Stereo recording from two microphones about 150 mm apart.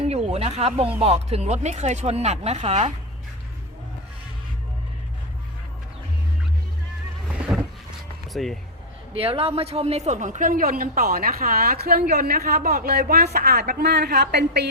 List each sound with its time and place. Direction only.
0.0 s snake: 45° right (ahead or behind)
0.9 s speech: 45° right (ahead or behind)
7.5 s a sound: 5° right (ahead or behind)
8.3 s speech: centre (ahead or behind)
9.1 s speech: 40° right (ahead or behind); by 14.7 s 90° right